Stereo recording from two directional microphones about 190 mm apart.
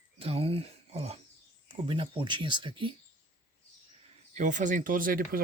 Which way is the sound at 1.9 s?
25° right (ahead or behind).